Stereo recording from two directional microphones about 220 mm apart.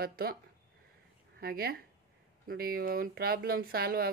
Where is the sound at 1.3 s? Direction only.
45° right (ahead or behind).